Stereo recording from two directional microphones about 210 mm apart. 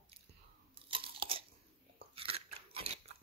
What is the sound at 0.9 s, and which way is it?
Crunch, 25° right (ahead or behind).